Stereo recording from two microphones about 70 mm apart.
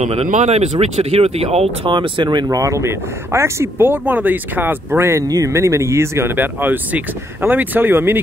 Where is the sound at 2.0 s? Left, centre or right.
Right.